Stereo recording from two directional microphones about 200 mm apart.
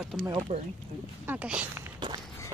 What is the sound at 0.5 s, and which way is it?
Speech, 40° right (ahead or behind).